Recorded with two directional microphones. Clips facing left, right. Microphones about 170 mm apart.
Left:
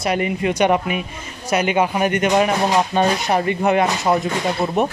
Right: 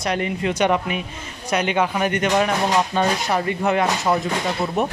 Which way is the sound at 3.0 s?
25° left (ahead or behind).